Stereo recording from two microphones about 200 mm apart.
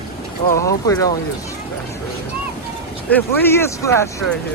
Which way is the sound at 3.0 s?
10° left (ahead or behind).